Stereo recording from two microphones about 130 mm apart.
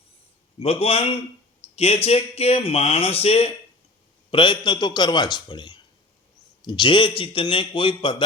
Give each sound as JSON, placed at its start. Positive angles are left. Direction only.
{"t": 0.6, "sound": "speech", "side_deg": 50}
{"t": 4.3, "sound": "a man's voice", "side_deg": 40}